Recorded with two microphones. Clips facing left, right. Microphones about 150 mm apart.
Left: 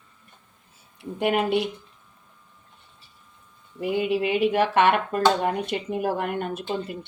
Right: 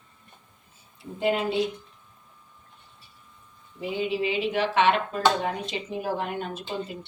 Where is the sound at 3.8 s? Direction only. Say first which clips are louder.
Left 4 dB; 55° left (ahead or behind).